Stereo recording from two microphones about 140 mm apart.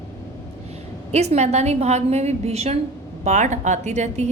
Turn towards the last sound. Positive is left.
turn(degrees=-55)  # may be behind; listen again after turning